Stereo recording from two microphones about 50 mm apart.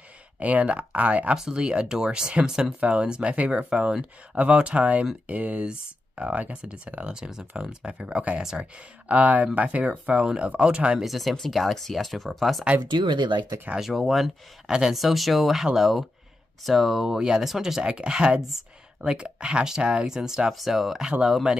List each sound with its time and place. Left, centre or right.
0.4 s speech: right
1.3 s speech: centre
8.4 s speech: centre
9.1 s speech: right
11.0 s speech: centre
13.7 s speech: centre
17.9 s speech: centre